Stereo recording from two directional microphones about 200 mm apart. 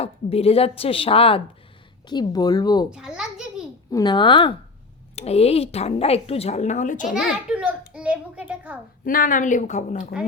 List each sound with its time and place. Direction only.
0.0 s a woman's voice: 30° left (ahead or behind)
2.9 s a sound: 5° right (ahead or behind)
3.9 s a woman's voice: 20° left (ahead or behind); by 7.1 s 40° left (ahead or behind)
7.1 s a child's voice: 5° right (ahead or behind)
9.0 s a woman's voice: 40° left (ahead or behind)